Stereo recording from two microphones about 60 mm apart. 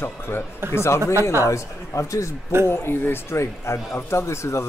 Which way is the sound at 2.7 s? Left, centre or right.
Left.